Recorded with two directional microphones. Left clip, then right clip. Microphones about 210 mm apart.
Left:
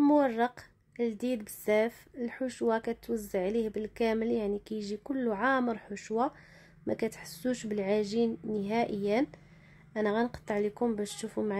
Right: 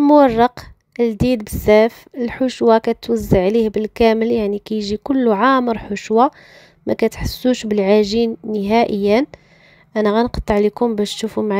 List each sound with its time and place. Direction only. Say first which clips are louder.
0.0 s a woman's voice: right 15 dB; 40° right (ahead or behind)